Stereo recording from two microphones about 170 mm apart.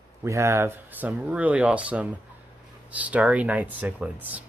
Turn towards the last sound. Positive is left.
turn(degrees=-10)  # may be behind; listen again after turning